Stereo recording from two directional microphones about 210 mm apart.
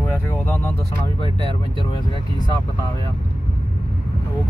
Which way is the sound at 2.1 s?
20° left (ahead or behind).